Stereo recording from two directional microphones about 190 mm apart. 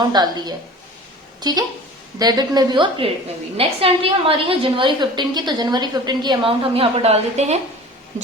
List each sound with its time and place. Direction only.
0.0 s a woman's voice: 20° right (ahead or behind)